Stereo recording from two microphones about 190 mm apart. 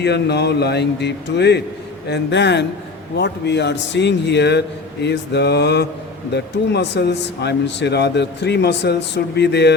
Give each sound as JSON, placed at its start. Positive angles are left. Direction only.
{"t": 0.0, "sound": "speech", "side_deg": 60}